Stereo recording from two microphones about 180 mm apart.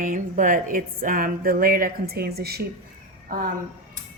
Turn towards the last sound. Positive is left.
turn(degrees=-55)  # may be behind; listen again after turning